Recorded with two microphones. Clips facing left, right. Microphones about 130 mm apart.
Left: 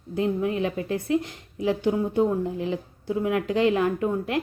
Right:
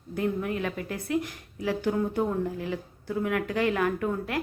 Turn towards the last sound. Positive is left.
turn(degrees=20)  # may be behind; listen again after turning